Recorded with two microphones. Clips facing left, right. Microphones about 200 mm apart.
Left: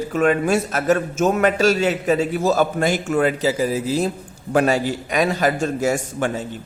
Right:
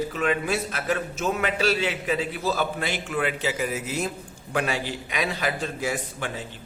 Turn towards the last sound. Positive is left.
turn(degrees=45)  # may be behind; listen again after turning